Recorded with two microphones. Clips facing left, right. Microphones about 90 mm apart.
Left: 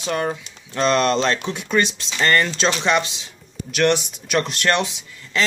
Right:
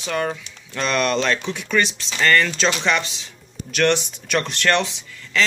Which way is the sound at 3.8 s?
10° left (ahead or behind).